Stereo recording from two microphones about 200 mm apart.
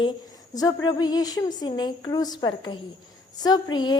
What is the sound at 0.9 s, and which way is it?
A woman's voice, 20° left (ahead or behind).